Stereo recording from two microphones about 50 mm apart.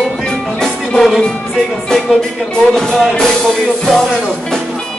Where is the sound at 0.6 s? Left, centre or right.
Centre.